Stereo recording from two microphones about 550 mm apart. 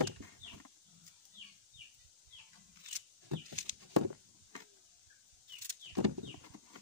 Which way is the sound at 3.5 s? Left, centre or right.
Right.